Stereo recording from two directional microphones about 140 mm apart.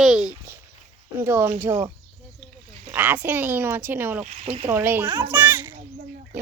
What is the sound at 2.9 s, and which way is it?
Speech, 15° right (ahead or behind).